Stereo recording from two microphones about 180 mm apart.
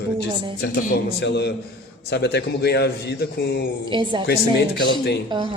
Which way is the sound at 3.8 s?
25° right (ahead or behind).